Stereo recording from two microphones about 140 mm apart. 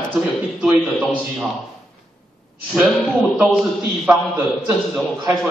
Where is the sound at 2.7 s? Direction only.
Centre (ahead or behind).